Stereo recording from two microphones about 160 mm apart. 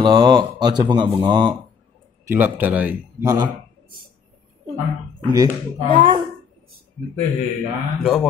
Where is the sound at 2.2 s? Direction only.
10° right (ahead or behind).